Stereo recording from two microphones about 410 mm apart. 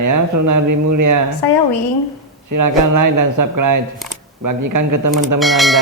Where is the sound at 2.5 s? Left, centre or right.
Right.